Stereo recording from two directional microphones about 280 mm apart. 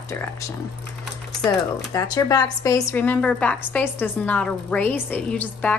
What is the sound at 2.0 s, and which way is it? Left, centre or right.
A woman's voice, centre.